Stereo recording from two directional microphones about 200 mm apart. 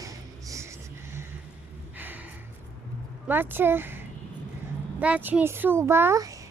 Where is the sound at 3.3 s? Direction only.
10° right (ahead or behind).